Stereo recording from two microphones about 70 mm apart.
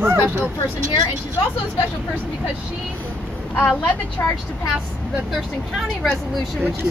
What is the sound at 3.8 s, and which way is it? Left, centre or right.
Speech, left.